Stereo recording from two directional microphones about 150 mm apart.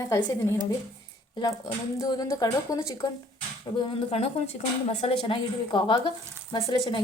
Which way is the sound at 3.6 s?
35° left (ahead or behind).